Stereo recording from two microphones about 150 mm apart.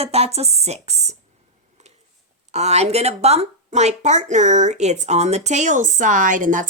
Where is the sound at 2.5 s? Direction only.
45° right (ahead or behind).